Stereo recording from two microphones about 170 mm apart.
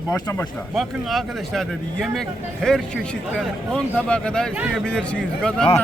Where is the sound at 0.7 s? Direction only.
Centre (ahead or behind).